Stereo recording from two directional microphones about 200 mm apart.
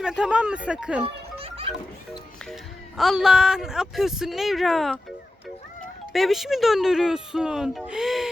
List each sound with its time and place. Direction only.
0.0 s speech: 5° right (ahead or behind)
1.0 s music: 30° right (ahead or behind)
3.0 s speech: centre (ahead or behind)
6.1 s speech: centre (ahead or behind)